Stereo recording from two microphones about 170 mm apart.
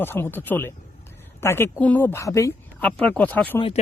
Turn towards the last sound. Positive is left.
turn(degrees=35)  # may be behind; listen again after turning